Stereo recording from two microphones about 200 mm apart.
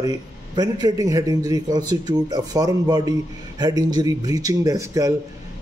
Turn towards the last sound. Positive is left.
turn(degrees=-15)  # may be behind; listen again after turning